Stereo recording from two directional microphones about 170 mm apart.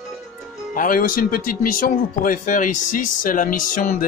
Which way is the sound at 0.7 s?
55° left (ahead or behind).